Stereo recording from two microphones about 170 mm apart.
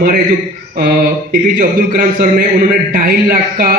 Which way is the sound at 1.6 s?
60° right (ahead or behind).